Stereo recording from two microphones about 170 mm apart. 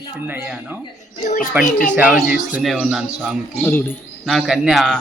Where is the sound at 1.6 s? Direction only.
50° left (ahead or behind).